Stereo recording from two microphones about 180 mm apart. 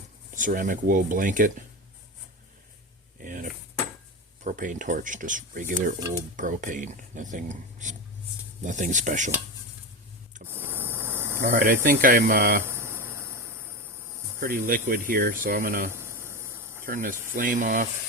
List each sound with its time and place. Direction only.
0.3 s speech: 50° right (ahead or behind)
3.2 s a sound: 50° right (ahead or behind)
4.4 s speech: 45° right (ahead or behind)
10.4 s ratchet: 10° right (ahead or behind)
11.3 s speech: 55° right (ahead or behind)
12.6 s a sound: 10° right (ahead or behind)
14.3 s speech: 55° right (ahead or behind)
16.0 s a sound: 15° right (ahead or behind)
16.8 s speech: 50° right (ahead or behind)